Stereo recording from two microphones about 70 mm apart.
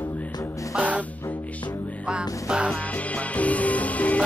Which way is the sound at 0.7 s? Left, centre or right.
Right.